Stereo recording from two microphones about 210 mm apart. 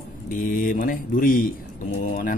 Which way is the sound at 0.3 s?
40° left (ahead or behind).